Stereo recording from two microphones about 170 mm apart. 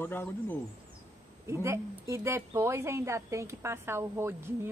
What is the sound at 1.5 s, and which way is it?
A woman's voice, 15° right (ahead or behind).